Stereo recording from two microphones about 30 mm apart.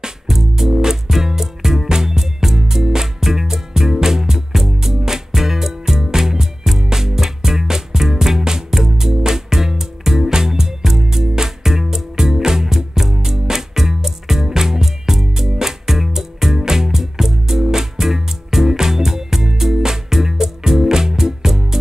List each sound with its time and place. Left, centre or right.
0.4 s music: centre